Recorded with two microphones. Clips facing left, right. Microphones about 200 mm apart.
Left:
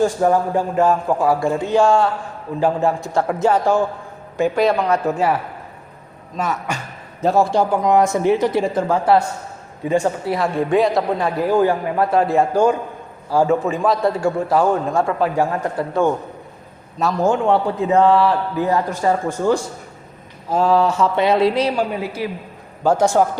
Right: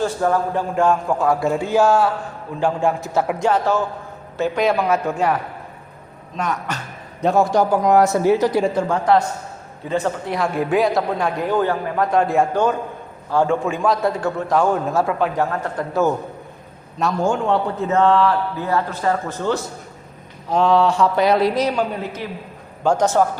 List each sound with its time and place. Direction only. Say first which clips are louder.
0.0 s a man's voice: left 3 dB; 15° left (ahead or behind)
1.5 s a man's voice: even; 5° right (ahead or behind)
7.9 s a man's voice: even; 15° left (ahead or behind)
8.6 s a man's voice: left 1 dB; 5° left (ahead or behind)
10.3 s a man's voice: left 1 dB; centre (ahead or behind)
15.4 s a man's voice: left 2 dB; 10° left (ahead or behind)
15.9 s a man's voice: even; 5° right (ahead or behind)
17.7 s a man's voice: left 1 dB; 15° left (ahead or behind)
21.2 s speech: left 3 dB; 25° left (ahead or behind)
21.8 s a man's voice: left 2 dB; 10° left (ahead or behind)